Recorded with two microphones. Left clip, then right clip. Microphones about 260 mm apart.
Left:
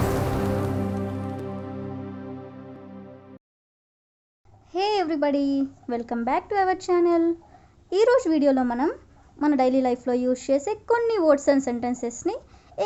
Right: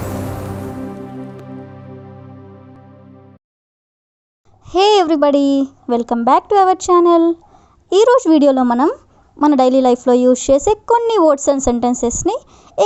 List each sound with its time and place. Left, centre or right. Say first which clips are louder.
4.6 s a woman's voice: right 12 dB; right